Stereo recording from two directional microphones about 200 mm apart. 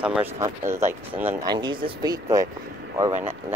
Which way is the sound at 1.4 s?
20° right (ahead or behind).